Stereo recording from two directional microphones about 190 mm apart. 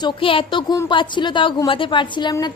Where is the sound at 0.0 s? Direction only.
30° left (ahead or behind).